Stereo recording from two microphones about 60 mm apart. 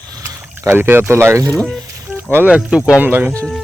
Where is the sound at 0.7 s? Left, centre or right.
Right.